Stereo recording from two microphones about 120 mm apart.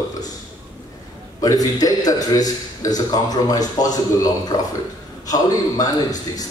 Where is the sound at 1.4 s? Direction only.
30° left (ahead or behind).